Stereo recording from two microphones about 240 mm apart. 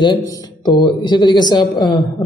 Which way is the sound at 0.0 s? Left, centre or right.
Centre.